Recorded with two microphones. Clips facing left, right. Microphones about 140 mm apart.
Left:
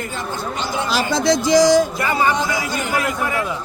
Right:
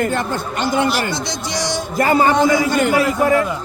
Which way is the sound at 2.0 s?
45° right (ahead or behind).